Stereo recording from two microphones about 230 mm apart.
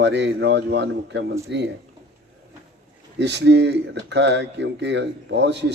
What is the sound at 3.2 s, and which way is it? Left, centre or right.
Speech, right.